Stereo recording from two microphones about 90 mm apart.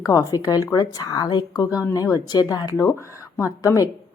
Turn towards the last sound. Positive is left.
turn(degrees=35)  # may be behind; listen again after turning